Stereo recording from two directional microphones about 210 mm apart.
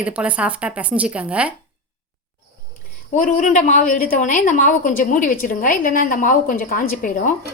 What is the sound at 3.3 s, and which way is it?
A woman's voice, 40° left (ahead or behind).